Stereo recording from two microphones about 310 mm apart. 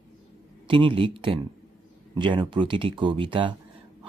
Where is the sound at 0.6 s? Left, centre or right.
Centre.